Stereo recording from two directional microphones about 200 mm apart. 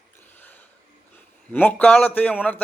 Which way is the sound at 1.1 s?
10° left (ahead or behind).